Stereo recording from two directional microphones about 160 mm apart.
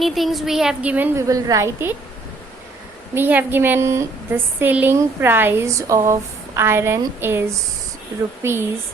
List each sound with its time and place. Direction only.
0.0 s a woman's voice: centre (ahead or behind); by 2.0 s 15° right (ahead or behind)
3.2 s a woman's voice: 10° right (ahead or behind)